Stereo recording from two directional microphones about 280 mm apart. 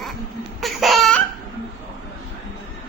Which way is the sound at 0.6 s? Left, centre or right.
Centre.